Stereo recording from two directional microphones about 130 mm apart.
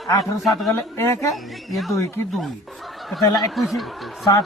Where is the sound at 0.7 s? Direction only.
20° left (ahead or behind).